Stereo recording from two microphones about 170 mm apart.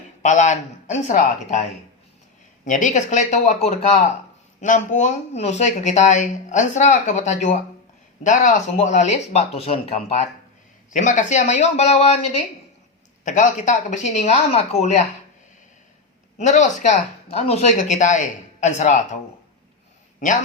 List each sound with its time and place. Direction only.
0.2 s speech: 45° left (ahead or behind)
2.6 s speech: 50° left (ahead or behind)
13.2 s speech: 50° left (ahead or behind)
16.4 s a man's voice: 45° left (ahead or behind)